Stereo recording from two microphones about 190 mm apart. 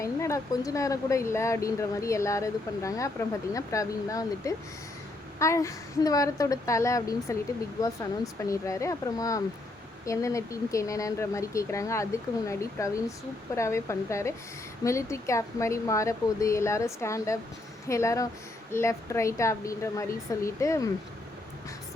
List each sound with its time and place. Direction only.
0.0 s speech: 15° left (ahead or behind)